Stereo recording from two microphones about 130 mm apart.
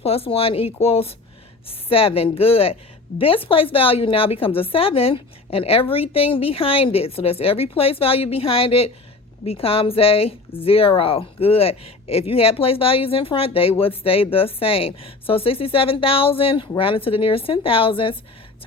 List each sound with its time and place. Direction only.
0.0 s a woman's voice: 50° left (ahead or behind)